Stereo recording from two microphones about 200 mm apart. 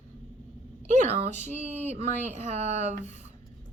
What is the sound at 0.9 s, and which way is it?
Speech, 35° right (ahead or behind).